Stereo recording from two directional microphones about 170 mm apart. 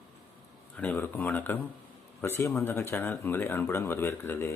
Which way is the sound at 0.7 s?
10° left (ahead or behind).